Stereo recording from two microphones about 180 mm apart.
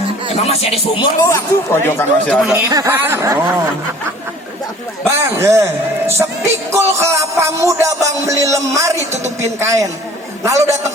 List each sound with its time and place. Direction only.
0.4 s music: 35° left (ahead or behind)
1.3 s speech: 15° left (ahead or behind)
2.6 s speech: 15° right (ahead or behind)
5.2 s speech: 15° right (ahead or behind)